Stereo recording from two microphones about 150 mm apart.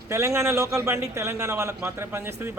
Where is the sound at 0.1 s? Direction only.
20° right (ahead or behind).